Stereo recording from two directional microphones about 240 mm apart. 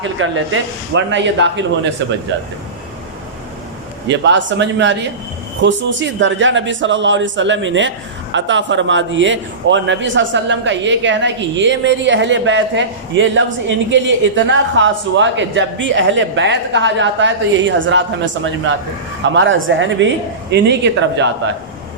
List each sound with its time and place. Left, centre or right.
0.0 s a man's voice: right
4.1 s a man's voice: right